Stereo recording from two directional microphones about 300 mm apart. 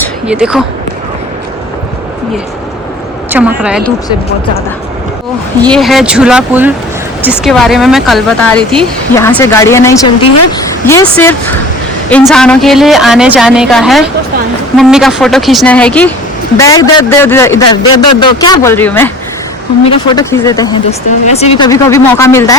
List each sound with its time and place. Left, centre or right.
0.0 s a sound: centre
3.2 s a woman's voice: centre
5.6 s speech: centre